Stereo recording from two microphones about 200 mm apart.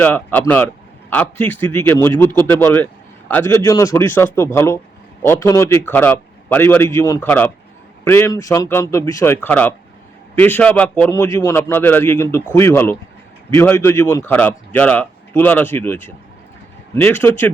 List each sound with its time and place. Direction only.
0.0 s speech: 10° left (ahead or behind)